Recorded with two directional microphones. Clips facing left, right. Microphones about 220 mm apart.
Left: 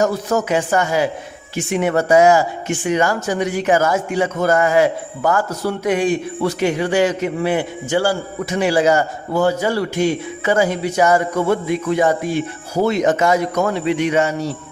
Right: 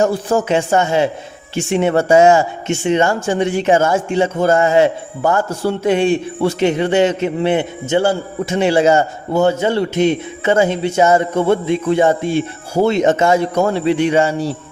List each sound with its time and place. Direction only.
0.0 s speech: 30° right (ahead or behind)